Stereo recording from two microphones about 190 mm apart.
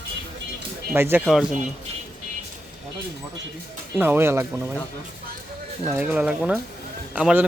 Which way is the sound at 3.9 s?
10° right (ahead or behind).